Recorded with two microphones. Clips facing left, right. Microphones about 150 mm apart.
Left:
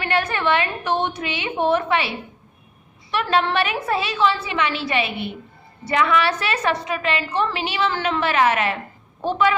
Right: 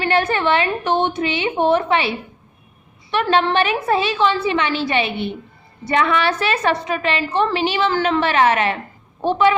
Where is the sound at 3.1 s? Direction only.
30° right (ahead or behind).